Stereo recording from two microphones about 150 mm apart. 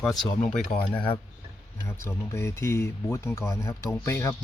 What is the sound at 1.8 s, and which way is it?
Speech, 20° left (ahead or behind).